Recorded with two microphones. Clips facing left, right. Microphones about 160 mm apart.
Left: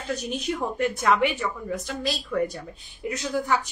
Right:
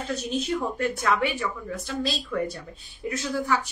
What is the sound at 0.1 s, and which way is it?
A woman's voice, 15° left (ahead or behind).